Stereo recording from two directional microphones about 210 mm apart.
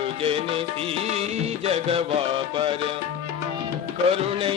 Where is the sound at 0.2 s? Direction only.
25° right (ahead or behind).